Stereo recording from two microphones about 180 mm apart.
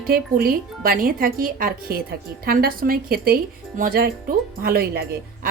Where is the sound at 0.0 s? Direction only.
55° right (ahead or behind).